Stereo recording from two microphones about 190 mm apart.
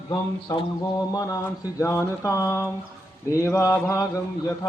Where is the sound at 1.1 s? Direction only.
20° left (ahead or behind).